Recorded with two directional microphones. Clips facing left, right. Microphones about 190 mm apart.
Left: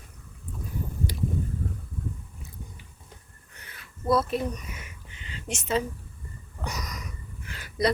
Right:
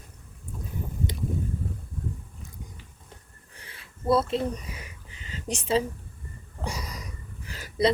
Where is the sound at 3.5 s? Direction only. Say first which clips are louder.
Even; 30° right (ahead or behind).